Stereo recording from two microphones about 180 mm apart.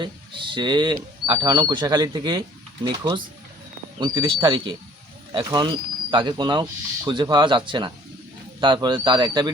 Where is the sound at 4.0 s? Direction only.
25° right (ahead or behind).